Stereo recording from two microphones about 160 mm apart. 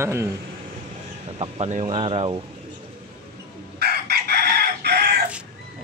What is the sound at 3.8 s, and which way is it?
Chicken, 80° right.